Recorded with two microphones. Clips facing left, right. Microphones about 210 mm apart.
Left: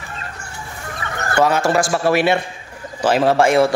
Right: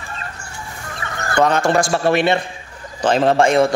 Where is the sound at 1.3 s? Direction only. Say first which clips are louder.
Even; 5° left (ahead or behind).